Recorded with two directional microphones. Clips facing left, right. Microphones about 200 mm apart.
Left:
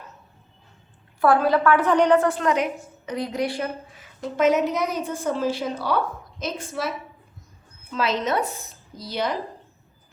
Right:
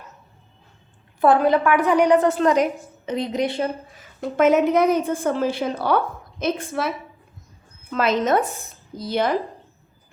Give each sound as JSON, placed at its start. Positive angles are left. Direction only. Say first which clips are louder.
{"t": 1.2, "sound": "a woman's voice", "louder": "right 2 dB", "side_deg": -20}
{"t": 2.4, "sound": "a woman's voice", "louder": "right 5 dB", "side_deg": -35}
{"t": 3.1, "sound": "a woman's voice", "louder": "right 3 dB", "side_deg": -20}
{"t": 4.2, "sound": "a woman's voice", "louder": "right 3 dB", "side_deg": -55}